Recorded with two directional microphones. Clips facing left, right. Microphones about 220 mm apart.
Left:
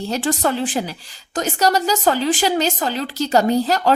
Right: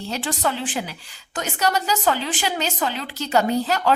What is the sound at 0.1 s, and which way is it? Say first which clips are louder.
A woman's voice: left 5 dB; 45° left (ahead or behind).